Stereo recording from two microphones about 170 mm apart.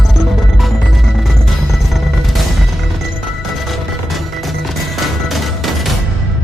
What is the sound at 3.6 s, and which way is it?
Music, centre (ahead or behind).